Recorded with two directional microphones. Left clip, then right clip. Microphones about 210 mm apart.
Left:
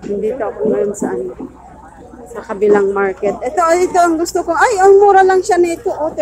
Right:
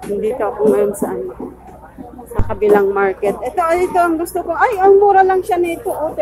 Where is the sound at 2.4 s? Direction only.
5° left (ahead or behind).